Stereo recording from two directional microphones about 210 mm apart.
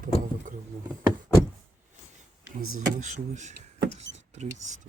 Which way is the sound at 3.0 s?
35° right (ahead or behind).